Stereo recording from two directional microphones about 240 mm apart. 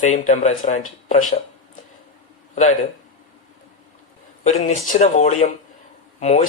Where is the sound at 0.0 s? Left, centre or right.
Left.